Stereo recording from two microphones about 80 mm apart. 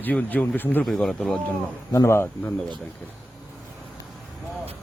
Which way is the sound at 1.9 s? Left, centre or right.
Left.